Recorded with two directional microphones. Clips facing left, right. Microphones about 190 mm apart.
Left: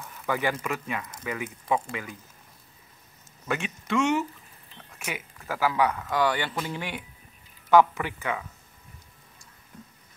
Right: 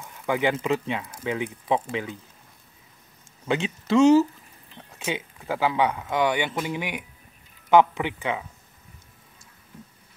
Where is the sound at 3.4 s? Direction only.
25° right (ahead or behind).